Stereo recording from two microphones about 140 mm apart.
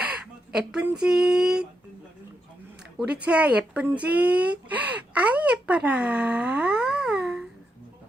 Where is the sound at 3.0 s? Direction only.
10° right (ahead or behind).